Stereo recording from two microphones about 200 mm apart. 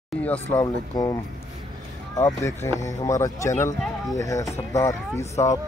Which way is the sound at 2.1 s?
15° left (ahead or behind).